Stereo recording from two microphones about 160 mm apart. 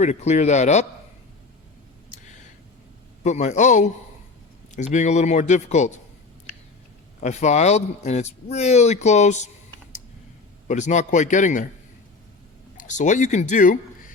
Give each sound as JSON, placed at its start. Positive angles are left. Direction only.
{"t": 0.0, "sound": "speech", "side_deg": 45}
{"t": 3.2, "sound": "speech", "side_deg": 45}
{"t": 7.2, "sound": "speech", "side_deg": 45}
{"t": 10.7, "sound": "speech", "side_deg": 50}
{"t": 12.7, "sound": "speech", "side_deg": 50}